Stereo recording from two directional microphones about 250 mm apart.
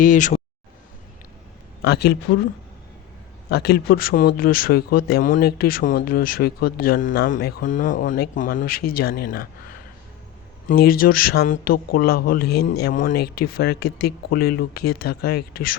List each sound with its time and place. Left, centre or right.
0.0 s speech: left
1.8 s speech: left
3.5 s speech: left
10.7 s speech: left